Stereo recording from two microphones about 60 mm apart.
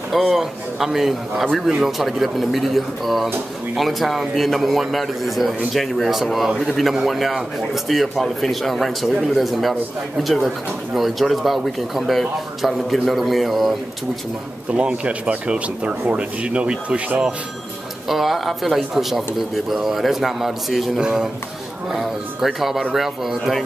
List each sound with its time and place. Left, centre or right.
0.3 s a man's voice: centre
14.7 s speech: centre
18.0 s a man's voice: centre